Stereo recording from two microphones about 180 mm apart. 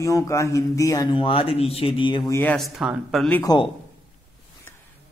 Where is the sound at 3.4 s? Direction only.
25° left (ahead or behind).